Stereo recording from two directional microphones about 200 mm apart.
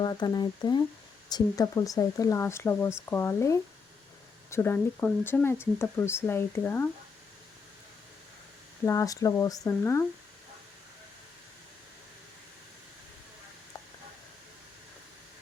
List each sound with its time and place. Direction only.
0.0 s speech: 20° left (ahead or behind)
8.8 s speech: 15° left (ahead or behind)